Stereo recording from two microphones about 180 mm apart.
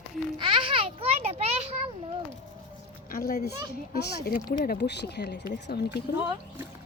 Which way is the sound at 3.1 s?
55° left (ahead or behind).